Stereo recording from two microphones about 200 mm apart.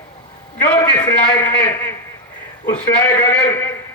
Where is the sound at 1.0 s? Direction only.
20° left (ahead or behind).